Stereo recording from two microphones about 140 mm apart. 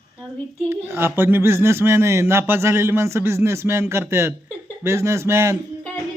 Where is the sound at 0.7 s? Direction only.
15° right (ahead or behind).